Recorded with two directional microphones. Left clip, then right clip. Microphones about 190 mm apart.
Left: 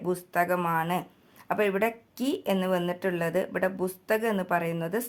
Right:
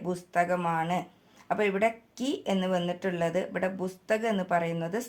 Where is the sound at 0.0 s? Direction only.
25° left (ahead or behind).